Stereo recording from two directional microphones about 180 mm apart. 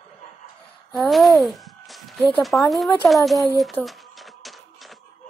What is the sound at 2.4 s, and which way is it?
Speech, centre (ahead or behind).